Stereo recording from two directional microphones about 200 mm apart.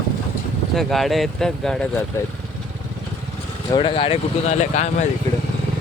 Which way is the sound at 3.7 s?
25° left (ahead or behind).